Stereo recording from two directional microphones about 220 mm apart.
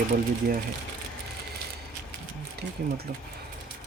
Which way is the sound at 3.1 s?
45° right (ahead or behind).